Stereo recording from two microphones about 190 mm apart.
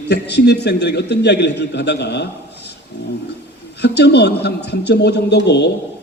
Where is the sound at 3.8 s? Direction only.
60° left (ahead or behind).